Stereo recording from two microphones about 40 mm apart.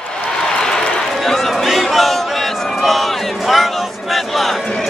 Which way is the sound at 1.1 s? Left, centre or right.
Centre.